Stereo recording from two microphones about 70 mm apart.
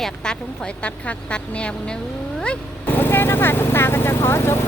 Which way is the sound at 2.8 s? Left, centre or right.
Left.